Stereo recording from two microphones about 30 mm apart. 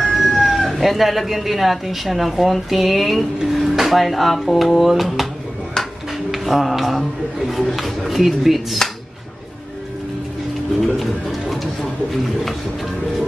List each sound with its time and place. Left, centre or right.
0.1 s speech: centre
5.8 s music: left
6.3 s speech: centre
11.0 s speech: centre